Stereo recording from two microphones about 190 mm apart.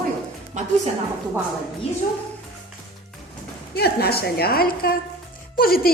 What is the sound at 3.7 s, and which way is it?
A woman's voice, 55° left (ahead or behind).